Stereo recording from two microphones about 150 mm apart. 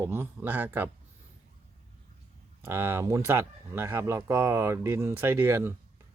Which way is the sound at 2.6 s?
15° right (ahead or behind).